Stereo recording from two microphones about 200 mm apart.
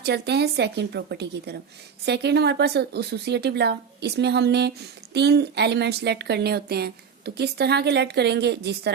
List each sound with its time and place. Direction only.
0.0 s a woman's voice: 55° right (ahead or behind)